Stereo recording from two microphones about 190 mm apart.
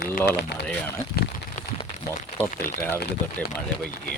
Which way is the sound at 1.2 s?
55° left (ahead or behind).